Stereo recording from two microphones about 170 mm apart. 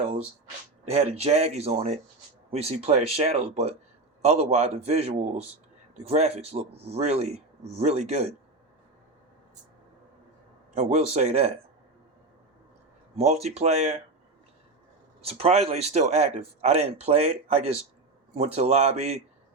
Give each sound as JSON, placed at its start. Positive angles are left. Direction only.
{"t": 0.9, "sound": "speech", "side_deg": -35}
{"t": 10.8, "sound": "speech", "side_deg": -40}
{"t": 13.1, "sound": "speech", "side_deg": -40}
{"t": 15.2, "sound": "speech", "side_deg": -35}